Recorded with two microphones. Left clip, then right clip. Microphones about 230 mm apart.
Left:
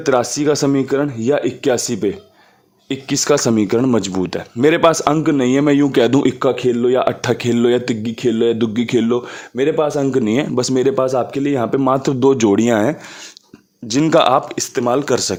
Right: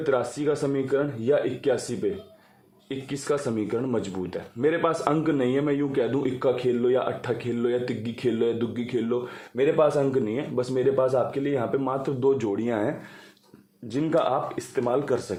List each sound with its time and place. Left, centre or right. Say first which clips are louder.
0.0 s speech: left 9 dB; left
13.9 s speech: left 11 dB; left